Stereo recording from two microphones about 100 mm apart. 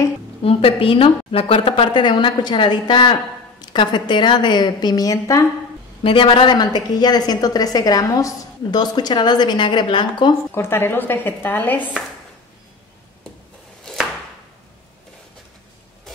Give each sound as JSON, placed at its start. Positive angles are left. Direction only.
{"t": 0.4, "sound": "a woman's voice", "side_deg": 70}
{"t": 6.0, "sound": "a woman's voice", "side_deg": 60}
{"t": 10.5, "sound": "speech", "side_deg": 25}